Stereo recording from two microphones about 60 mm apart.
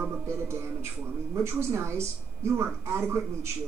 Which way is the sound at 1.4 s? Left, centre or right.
Right.